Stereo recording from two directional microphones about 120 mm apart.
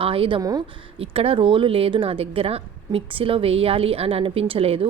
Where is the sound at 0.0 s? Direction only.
50° right (ahead or behind).